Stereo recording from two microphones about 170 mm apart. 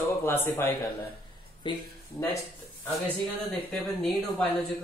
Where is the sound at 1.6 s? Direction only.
30° left (ahead or behind).